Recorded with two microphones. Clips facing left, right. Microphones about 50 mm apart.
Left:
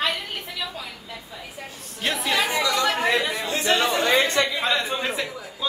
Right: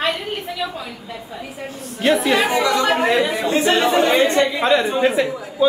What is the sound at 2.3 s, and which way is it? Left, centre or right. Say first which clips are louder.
A man's voice: right 6 dB; right.